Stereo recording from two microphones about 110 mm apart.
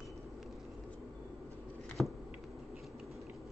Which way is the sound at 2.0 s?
Centre (ahead or behind).